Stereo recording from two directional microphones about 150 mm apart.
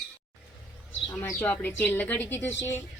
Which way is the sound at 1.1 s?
15° left (ahead or behind).